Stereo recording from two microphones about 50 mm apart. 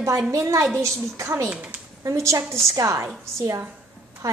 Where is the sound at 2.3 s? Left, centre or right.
Right.